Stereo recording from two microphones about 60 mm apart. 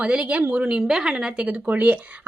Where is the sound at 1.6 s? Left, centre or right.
Right.